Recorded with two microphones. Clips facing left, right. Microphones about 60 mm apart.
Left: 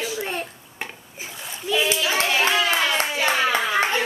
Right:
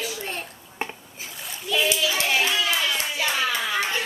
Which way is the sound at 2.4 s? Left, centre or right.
Left.